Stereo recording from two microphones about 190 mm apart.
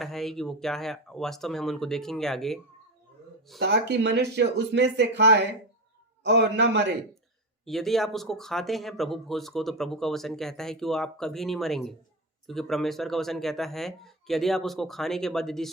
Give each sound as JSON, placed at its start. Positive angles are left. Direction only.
{"t": 0.0, "sound": "speech", "side_deg": 0}
{"t": 3.6, "sound": "speech", "side_deg": -65}
{"t": 7.6, "sound": "speech", "side_deg": 0}